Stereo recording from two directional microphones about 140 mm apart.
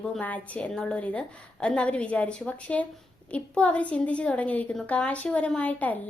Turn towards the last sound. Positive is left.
turn(degrees=10)  # may be behind; listen again after turning